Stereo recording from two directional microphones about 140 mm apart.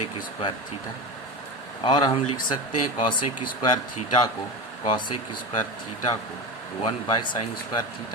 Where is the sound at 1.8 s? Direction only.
35° left (ahead or behind).